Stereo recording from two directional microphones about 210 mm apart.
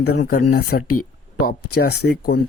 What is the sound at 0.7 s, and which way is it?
Speech, 50° left (ahead or behind).